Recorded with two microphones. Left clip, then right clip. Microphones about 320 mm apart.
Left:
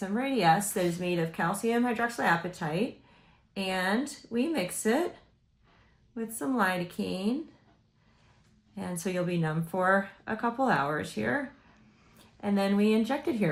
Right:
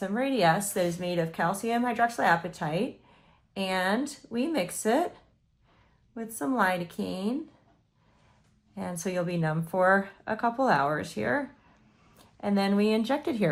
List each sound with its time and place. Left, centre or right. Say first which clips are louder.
0.0 s a woman's voice: right 2 dB; centre
6.1 s a woman's voice: right 2 dB; centre
8.7 s a woman's voice: right 2 dB; centre